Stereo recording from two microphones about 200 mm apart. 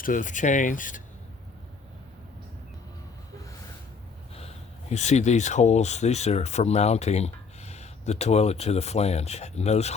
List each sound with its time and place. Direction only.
0.0 s speech: 40° left (ahead or behind)
4.4 s speech: 30° left (ahead or behind)